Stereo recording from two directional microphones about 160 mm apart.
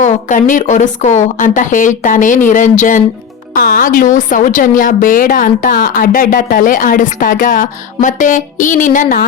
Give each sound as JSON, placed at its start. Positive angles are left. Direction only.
{"t": 0.0, "sound": "a woman's voice", "side_deg": 50}
{"t": 3.5, "sound": "a woman's voice", "side_deg": 65}